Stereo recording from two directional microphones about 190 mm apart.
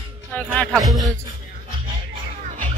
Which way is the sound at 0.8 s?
Centre (ahead or behind).